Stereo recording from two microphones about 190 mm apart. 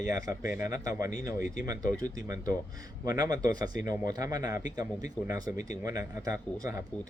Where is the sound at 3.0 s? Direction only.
20° right (ahead or behind).